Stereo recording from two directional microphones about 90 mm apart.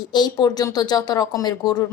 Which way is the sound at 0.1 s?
50° left (ahead or behind).